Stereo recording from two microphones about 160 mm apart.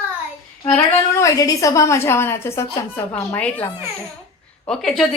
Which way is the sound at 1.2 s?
20° left (ahead or behind).